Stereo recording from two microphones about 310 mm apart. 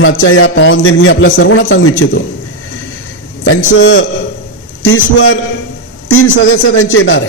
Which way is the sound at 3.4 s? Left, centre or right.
Left.